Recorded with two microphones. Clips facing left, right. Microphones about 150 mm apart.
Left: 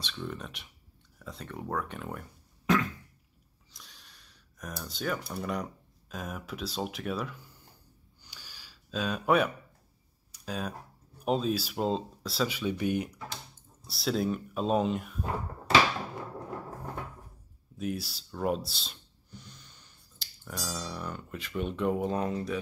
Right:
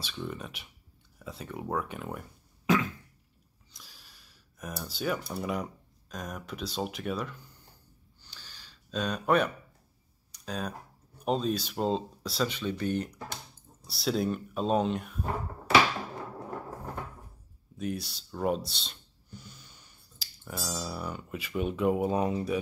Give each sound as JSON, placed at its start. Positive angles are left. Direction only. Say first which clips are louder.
{"t": 0.0, "sound": "speech", "louder": "right 1 dB", "side_deg": -5}
{"t": 8.2, "sound": "a sound", "louder": "even", "side_deg": 10}
{"t": 10.3, "sound": "tick-tock", "louder": "even", "side_deg": 5}
{"t": 11.1, "sound": "speech", "louder": "even", "side_deg": 5}
{"t": 13.8, "sound": "speech", "louder": "even", "side_deg": 0}
{"t": 17.7, "sound": "speech", "louder": "even", "side_deg": 0}